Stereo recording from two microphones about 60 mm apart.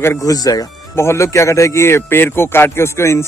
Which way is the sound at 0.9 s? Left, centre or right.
Left.